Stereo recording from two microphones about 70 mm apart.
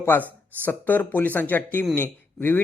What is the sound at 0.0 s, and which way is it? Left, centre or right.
Speech, left.